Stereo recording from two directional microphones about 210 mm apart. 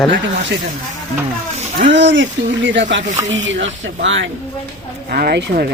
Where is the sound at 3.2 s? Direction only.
60° right (ahead or behind).